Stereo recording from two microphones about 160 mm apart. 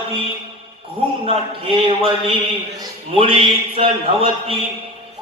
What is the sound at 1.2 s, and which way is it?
Speech, 35° right (ahead or behind).